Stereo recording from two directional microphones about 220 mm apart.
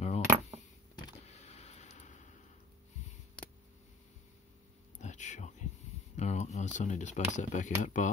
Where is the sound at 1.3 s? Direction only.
30° left (ahead or behind).